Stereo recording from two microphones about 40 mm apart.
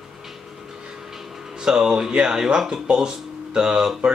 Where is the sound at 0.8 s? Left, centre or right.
Centre.